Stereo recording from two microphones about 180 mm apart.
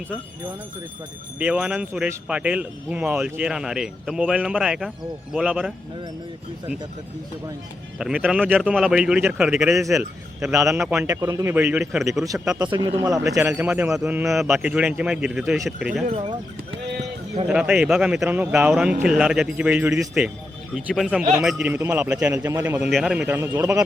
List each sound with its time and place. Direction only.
1.4 s speech: 10° right (ahead or behind)
7.9 s a man's voice: 5° right (ahead or behind)
10.5 s a man's voice: 15° right (ahead or behind)
10.8 s speech: 5° right (ahead or behind)
11.1 s a man's voice: 20° right (ahead or behind); by 12.2 s centre (ahead or behind)
12.5 s speech: 25° right (ahead or behind); by 16.0 s 5° right (ahead or behind)
16.1 s speech: 30° right (ahead or behind)
17.5 s a man's voice: 5° right (ahead or behind)